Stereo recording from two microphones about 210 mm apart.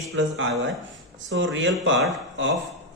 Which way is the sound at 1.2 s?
65° right (ahead or behind).